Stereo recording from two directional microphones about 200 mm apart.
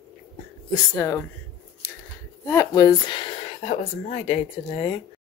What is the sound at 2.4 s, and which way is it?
Speech, 15° left (ahead or behind).